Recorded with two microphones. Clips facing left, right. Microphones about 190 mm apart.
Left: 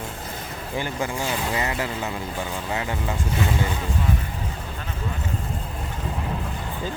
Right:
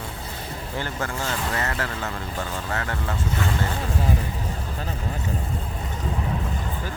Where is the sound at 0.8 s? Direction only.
15° left (ahead or behind).